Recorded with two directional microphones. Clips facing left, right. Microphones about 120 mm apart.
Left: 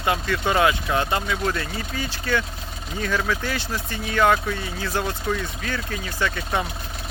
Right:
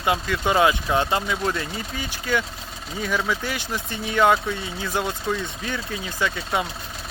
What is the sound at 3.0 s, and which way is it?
Speech, 10° right (ahead or behind).